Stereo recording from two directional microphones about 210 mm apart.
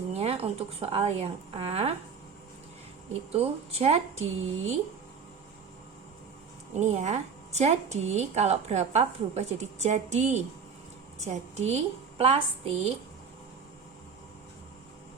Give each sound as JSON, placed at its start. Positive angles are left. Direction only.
{"t": 0.2, "sound": "a woman's voice", "side_deg": -30}
{"t": 3.3, "sound": "speech", "side_deg": -30}
{"t": 6.7, "sound": "speech", "side_deg": -30}